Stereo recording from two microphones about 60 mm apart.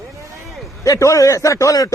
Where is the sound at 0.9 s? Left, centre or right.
Left.